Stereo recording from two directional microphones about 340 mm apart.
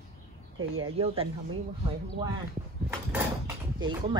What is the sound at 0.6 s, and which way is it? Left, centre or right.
Speech, right.